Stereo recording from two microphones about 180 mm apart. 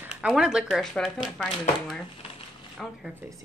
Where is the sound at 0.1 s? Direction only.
5° right (ahead or behind).